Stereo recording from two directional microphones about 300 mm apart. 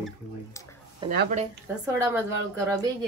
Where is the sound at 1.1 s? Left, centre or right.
Right.